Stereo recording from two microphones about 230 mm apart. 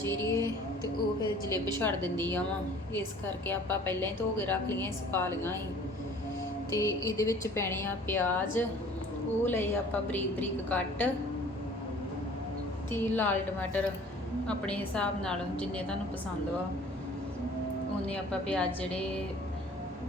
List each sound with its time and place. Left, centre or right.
0.0 s music: centre
1.5 s a woman's voice: centre
1.8 s a woman's voice: centre
3.4 s a woman's voice: centre
6.7 s a woman's voice: centre
12.9 s a woman's voice: centre
18.1 s a woman's voice: centre